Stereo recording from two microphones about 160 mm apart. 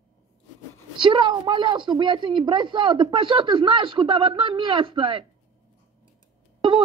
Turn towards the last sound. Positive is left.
turn(degrees=-30)  # may be behind; listen again after turning